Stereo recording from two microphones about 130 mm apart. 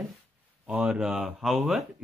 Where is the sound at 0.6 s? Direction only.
10° right (ahead or behind).